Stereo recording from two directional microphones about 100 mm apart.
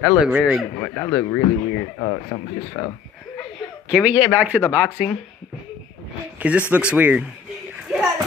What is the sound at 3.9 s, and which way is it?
Speech, 10° right (ahead or behind).